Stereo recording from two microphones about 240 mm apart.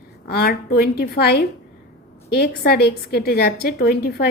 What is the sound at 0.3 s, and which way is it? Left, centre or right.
A woman's voice, left.